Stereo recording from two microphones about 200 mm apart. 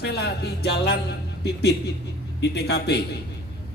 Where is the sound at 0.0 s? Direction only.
55° left (ahead or behind).